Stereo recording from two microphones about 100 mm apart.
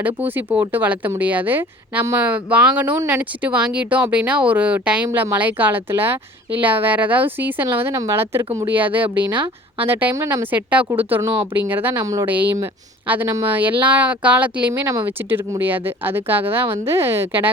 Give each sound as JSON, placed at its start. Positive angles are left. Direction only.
{"t": 0.2, "sound": "speech", "side_deg": -20}
{"t": 9.3, "sound": "speech", "side_deg": -55}
{"t": 9.8, "sound": "speech", "side_deg": -20}
{"t": 14.7, "sound": "speech", "side_deg": -30}